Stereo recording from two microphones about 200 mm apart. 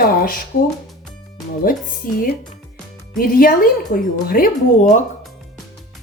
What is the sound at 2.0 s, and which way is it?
A woman's voice, 45° left (ahead or behind).